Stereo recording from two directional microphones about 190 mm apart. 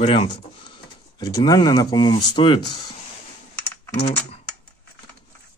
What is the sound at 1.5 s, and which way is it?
Speech, 20° left (ahead or behind).